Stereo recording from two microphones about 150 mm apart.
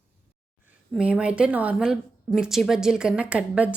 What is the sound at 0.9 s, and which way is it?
A woman's voice, 5° right (ahead or behind).